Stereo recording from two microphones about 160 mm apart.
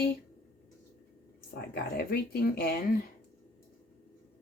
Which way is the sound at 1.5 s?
70° left (ahead or behind).